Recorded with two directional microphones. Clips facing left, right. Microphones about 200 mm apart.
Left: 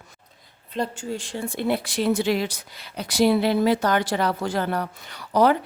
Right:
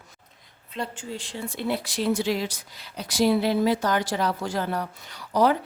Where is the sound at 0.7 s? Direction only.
45° left (ahead or behind).